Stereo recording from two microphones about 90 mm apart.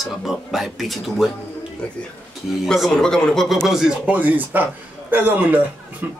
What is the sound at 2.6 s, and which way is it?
Speech, centre (ahead or behind).